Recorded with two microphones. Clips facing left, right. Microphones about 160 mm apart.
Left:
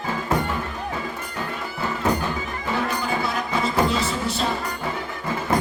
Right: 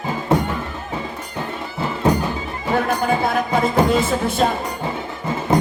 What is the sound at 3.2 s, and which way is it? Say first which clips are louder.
Music: right 6 dB; 50° right (ahead or behind).